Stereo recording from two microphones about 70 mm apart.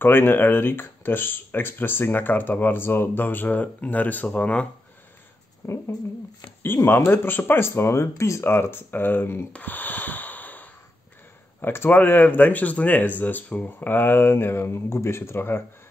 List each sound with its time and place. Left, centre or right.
0.0 s speech: left
5.6 s speech: left
6.9 s speech: left
9.5 s gasp: left
11.6 s speech: left